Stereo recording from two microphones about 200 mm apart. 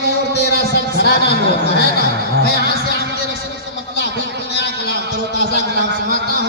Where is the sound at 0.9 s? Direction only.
55° left (ahead or behind).